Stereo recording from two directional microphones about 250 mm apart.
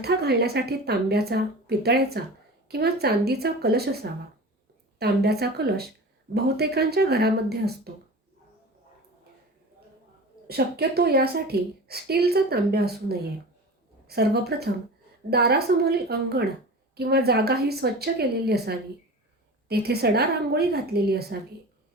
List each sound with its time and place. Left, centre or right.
0.0 s a woman's voice: right
10.4 s a woman's voice: right